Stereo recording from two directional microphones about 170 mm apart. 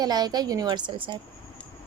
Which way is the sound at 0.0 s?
25° right (ahead or behind).